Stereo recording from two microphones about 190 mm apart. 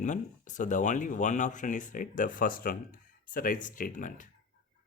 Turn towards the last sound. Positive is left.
turn(degrees=45)  # may be behind; listen again after turning